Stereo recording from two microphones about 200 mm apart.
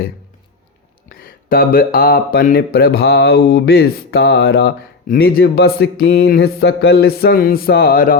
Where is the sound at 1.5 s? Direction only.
45° left (ahead or behind).